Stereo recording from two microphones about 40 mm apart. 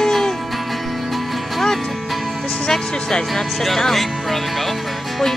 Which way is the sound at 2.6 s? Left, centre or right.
Centre.